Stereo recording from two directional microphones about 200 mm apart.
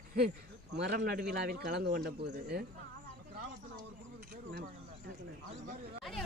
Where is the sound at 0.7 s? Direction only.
60° right (ahead or behind).